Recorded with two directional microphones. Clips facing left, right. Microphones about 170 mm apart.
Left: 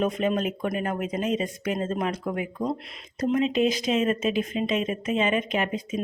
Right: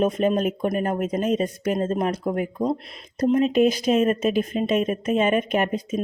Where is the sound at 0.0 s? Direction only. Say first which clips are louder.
Right 4 dB; 45° right (ahead or behind).